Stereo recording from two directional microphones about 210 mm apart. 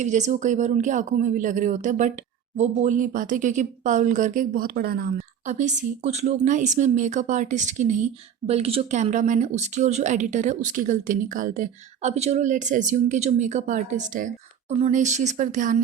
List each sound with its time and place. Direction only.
0.0 s speech: 35° right (ahead or behind)
5.5 s speech: 35° right (ahead or behind)